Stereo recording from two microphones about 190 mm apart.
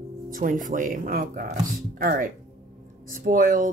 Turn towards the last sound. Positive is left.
turn(degrees=-45)  # may be behind; listen again after turning